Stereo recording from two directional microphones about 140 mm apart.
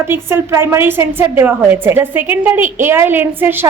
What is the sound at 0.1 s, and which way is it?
A woman's voice, 15° right (ahead or behind).